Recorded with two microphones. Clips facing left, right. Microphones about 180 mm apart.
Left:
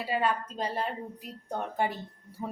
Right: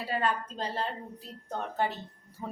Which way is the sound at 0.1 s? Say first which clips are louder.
Left 1 dB; 10° left (ahead or behind).